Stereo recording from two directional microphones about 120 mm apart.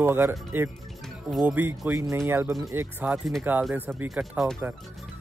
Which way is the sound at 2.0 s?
25° right (ahead or behind).